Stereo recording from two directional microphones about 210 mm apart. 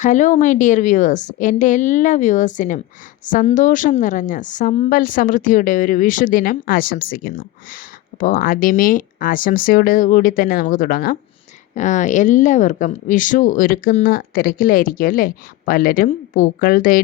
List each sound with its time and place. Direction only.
0.0 s speech: 35° left (ahead or behind)